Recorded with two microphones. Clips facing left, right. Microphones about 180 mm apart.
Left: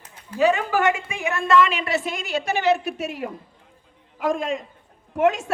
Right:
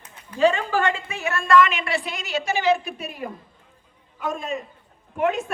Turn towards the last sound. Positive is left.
turn(degrees=90)